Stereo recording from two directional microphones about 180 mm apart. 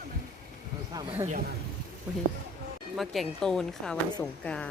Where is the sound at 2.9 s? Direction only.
Centre (ahead or behind).